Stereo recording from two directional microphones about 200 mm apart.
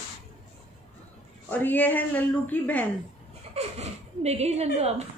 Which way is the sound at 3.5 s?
30° right (ahead or behind).